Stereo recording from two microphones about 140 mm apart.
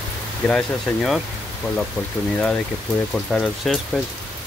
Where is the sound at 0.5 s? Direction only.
5° left (ahead or behind).